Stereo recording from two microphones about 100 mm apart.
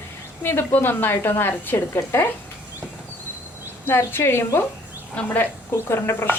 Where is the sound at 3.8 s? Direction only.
25° left (ahead or behind).